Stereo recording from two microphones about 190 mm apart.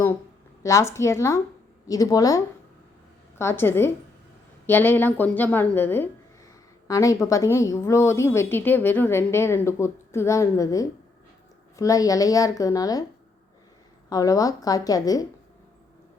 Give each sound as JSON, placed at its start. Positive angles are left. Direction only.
{"t": 0.6, "sound": "a woman's voice", "side_deg": 15}
{"t": 14.1, "sound": "a woman's voice", "side_deg": 20}